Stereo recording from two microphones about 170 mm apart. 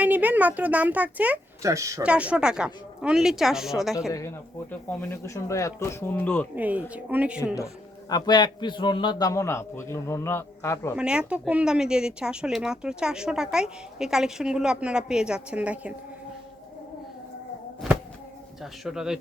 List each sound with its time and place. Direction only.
0.0 s speech: 10° right (ahead or behind)
2.0 s speech: 5° right (ahead or behind)
4.7 s a man's voice: 10° left (ahead or behind)
6.6 s speech: 10° right (ahead or behind)
8.1 s a man's voice: 25° left (ahead or behind)
10.9 s speech: 5° right (ahead or behind)
18.6 s speech: 5° right (ahead or behind)